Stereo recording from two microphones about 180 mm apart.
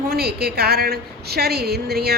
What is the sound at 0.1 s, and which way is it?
A woman's voice, 60° right (ahead or behind).